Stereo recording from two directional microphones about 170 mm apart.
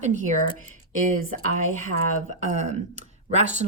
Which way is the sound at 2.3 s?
45° right (ahead or behind).